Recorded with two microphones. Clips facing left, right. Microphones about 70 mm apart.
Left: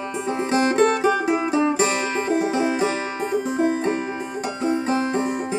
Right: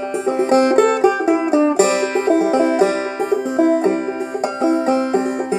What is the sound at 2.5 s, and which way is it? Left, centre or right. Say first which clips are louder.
Music: right 7 dB; right.